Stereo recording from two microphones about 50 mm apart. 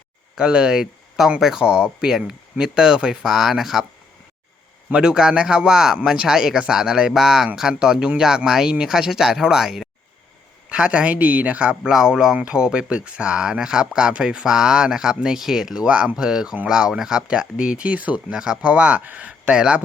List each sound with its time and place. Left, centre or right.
0.3 s speech: centre
3.2 s speech: centre
4.9 s speech: centre
10.7 s speech: right
11.8 s speech: centre; by 18.3 s right
18.3 s speech: centre
19.5 s speech: centre